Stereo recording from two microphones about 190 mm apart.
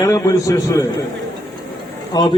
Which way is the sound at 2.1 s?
20° left (ahead or behind).